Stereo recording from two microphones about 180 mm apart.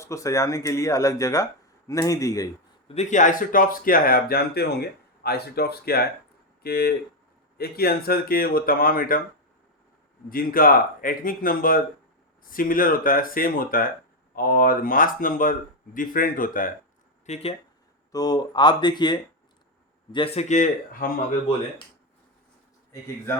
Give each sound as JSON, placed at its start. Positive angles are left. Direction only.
{"t": 0.0, "sound": "speech", "side_deg": 15}
{"t": 2.9, "sound": "speech", "side_deg": 40}
{"t": 10.2, "sound": "speech", "side_deg": 55}
{"t": 17.2, "sound": "speech", "side_deg": 40}
{"t": 18.1, "sound": "a man's voice", "side_deg": 20}